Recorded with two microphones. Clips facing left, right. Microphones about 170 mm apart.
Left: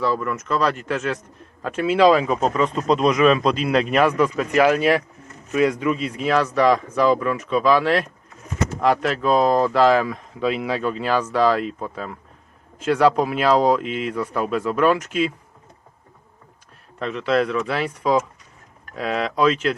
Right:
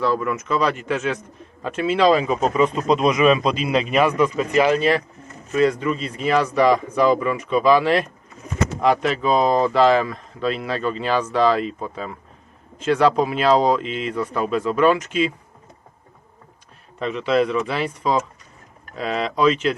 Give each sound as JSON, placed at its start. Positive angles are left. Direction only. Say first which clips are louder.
{"t": 0.0, "sound": "speech", "louder": "right 1 dB", "side_deg": 0}
{"t": 17.0, "sound": "speech", "louder": "right 1 dB", "side_deg": 0}